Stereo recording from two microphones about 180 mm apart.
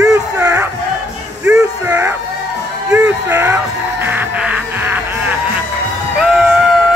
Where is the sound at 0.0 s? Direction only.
20° right (ahead or behind).